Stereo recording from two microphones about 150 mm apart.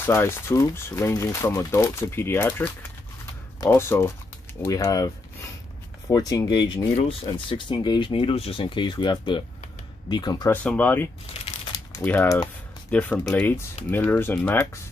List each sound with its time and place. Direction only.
0.0 s speech: 15° left (ahead or behind)
10.5 s speech: 10° left (ahead or behind)